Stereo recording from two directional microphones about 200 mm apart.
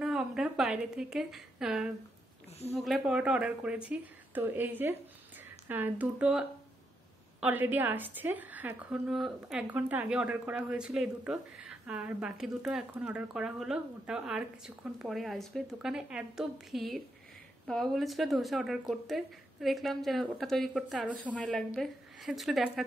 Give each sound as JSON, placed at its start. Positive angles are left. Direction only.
{"t": 0.0, "sound": "a woman's voice", "side_deg": 0}